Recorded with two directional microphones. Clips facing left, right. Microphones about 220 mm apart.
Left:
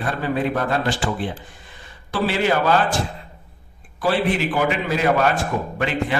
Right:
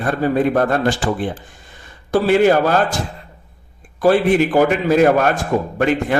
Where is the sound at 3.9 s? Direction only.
45° right (ahead or behind).